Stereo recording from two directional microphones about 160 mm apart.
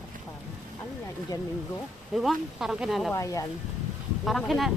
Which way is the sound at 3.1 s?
20° left (ahead or behind).